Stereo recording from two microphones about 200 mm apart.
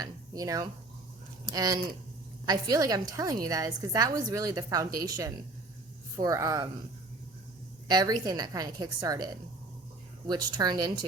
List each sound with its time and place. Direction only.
0.0 s a woman's voice: 20° right (ahead or behind)
7.9 s a woman's voice: 20° right (ahead or behind)